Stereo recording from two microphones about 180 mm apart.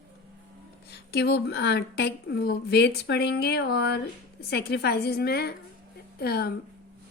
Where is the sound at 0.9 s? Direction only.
65° left (ahead or behind).